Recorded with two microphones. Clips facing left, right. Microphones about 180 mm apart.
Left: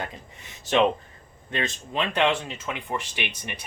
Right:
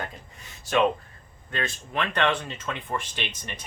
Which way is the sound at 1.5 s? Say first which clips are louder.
Left 2 dB; 20° left (ahead or behind).